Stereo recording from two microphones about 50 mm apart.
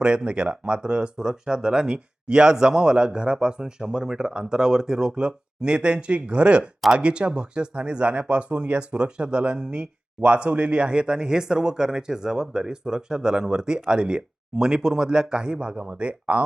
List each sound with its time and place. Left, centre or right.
0.0 s speech: centre